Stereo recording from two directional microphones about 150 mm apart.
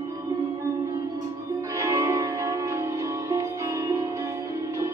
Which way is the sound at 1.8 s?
20° right (ahead or behind).